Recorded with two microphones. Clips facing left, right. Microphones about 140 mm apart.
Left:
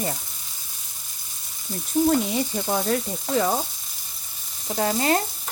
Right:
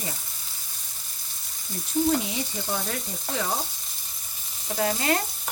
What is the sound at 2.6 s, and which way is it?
Frying, 45° left (ahead or behind).